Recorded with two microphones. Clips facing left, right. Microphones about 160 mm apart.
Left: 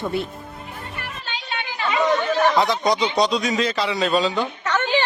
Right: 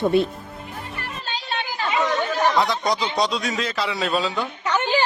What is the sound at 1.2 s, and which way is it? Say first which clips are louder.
Chatter: right 3 dB; 40° right (ahead or behind).